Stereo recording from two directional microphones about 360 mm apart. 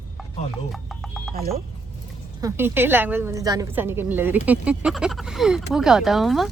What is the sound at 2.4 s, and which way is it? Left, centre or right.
Speech, centre.